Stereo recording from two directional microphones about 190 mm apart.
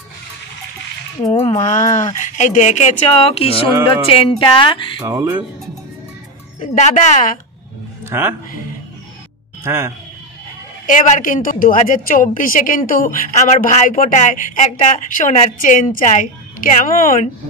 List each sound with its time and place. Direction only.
1.2 s speech: 25° left (ahead or behind)
5.0 s music: 15° right (ahead or behind)
6.6 s speech: 40° left (ahead or behind)
8.0 s speech: 10° right (ahead or behind)
9.6 s a man's voice: 15° right (ahead or behind)
10.9 s a woman's voice: 40° left (ahead or behind)